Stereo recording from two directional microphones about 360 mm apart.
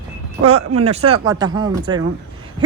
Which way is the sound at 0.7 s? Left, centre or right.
Centre.